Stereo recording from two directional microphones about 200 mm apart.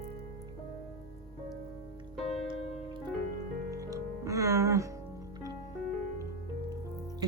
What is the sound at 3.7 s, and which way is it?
Music, 15° right (ahead or behind).